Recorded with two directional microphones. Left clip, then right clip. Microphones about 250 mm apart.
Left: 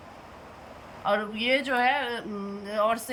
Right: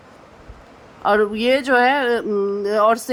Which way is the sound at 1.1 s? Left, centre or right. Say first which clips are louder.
Right 9 dB; centre.